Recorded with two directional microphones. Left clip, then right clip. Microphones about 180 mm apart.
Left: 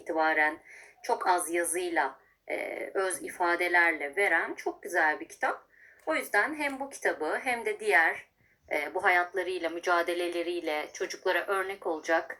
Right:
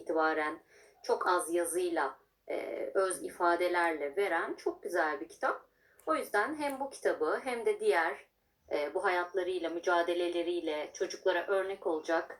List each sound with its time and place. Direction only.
0.2 s a woman's voice: 50° left (ahead or behind)